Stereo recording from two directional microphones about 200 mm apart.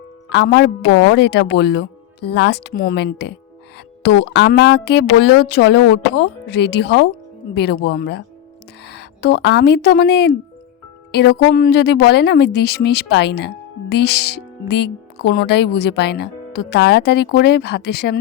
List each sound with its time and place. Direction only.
0.3 s speech: 60° left (ahead or behind)